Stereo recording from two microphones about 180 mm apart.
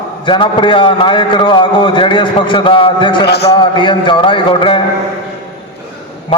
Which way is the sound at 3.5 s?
25° left (ahead or behind).